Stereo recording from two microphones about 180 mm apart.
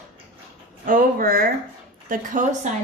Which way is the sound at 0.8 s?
50° right (ahead or behind).